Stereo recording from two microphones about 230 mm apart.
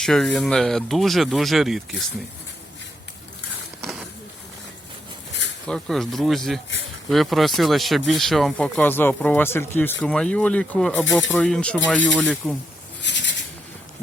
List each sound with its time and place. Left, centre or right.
0.0 s speech: centre
5.6 s speech: centre
13.0 s a sound: left